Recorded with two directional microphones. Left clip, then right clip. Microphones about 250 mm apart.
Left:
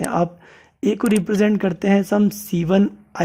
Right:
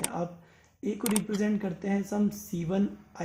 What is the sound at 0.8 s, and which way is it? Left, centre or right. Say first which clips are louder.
Speech: left 12 dB; left.